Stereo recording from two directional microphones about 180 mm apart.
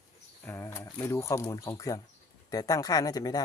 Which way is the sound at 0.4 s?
15° left (ahead or behind).